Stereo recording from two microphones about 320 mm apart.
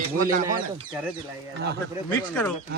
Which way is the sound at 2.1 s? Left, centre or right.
Centre.